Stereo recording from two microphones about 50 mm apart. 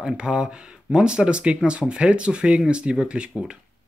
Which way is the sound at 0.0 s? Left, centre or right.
Centre.